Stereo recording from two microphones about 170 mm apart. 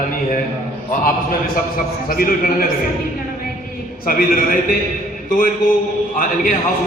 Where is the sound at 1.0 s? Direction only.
60° left (ahead or behind).